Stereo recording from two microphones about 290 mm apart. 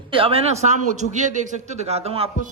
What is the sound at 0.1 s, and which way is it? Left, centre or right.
A man's voice, centre.